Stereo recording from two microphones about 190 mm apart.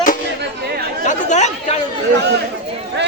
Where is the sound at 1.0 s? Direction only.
40° left (ahead or behind).